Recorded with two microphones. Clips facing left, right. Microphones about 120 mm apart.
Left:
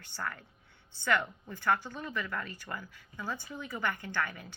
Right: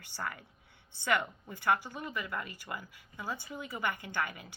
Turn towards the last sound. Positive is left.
turn(degrees=-15)  # may be behind; listen again after turning